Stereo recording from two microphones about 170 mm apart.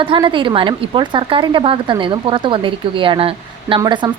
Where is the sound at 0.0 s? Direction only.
30° right (ahead or behind).